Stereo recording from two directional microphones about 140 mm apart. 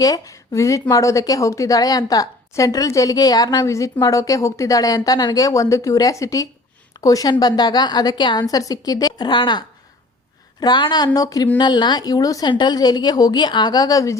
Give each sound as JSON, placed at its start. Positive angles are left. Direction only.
{"t": 0.0, "sound": "speech", "side_deg": 25}